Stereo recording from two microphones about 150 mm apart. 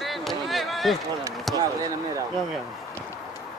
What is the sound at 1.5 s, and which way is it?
Speech, 25° right (ahead or behind).